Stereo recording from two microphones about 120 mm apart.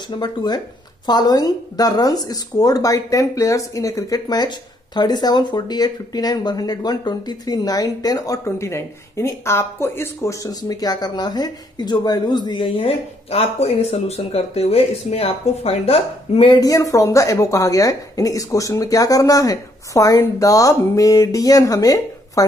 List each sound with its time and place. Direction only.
0.2 s speech: 35° left (ahead or behind); by 16.5 s 55° left (ahead or behind)
16.5 s a woman's voice: 30° left (ahead or behind)